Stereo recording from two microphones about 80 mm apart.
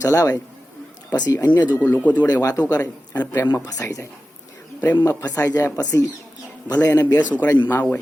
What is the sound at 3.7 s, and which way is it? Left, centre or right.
Speech, left.